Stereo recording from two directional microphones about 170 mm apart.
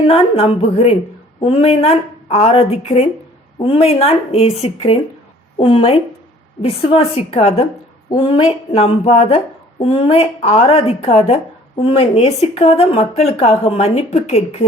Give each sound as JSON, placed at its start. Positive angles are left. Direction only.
{"t": 0.1, "sound": "speech", "side_deg": 35}